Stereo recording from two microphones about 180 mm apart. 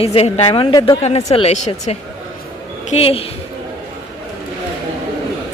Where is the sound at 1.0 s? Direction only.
35° left (ahead or behind).